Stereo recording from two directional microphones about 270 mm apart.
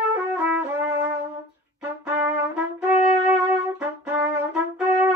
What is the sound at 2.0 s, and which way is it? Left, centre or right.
Music, centre.